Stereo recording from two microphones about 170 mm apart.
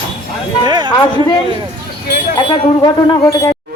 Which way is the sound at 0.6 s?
25° right (ahead or behind).